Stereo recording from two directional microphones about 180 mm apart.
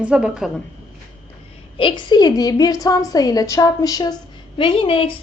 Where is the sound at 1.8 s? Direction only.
25° left (ahead or behind).